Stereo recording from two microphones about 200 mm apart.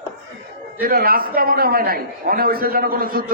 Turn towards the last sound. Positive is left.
turn(degrees=-45)  # may be behind; listen again after turning